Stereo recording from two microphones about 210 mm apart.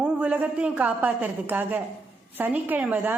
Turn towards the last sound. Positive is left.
turn(degrees=-10)  # may be behind; listen again after turning